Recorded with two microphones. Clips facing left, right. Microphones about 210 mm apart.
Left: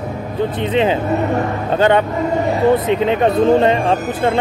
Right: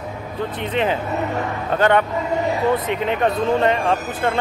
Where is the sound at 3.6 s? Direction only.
25° left (ahead or behind).